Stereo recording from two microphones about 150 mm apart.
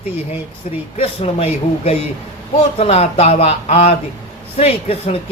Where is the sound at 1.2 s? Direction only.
40° left (ahead or behind).